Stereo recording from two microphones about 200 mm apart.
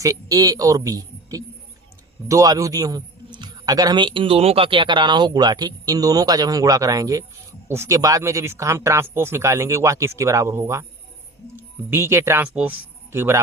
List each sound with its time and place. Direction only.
0.0 s a man's voice: 15° right (ahead or behind)